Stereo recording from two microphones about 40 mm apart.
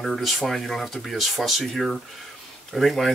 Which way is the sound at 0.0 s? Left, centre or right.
Centre.